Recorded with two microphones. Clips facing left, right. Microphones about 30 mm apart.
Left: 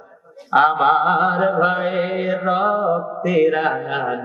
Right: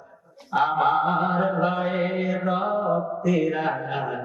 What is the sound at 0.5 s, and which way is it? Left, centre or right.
Mantra, left.